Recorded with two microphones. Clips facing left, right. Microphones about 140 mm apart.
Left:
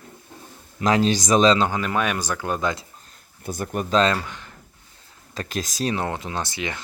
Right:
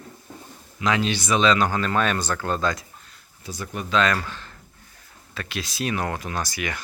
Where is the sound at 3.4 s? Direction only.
50° left (ahead or behind).